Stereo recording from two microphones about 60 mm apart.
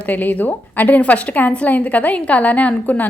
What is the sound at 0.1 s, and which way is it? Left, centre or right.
A woman's voice, left.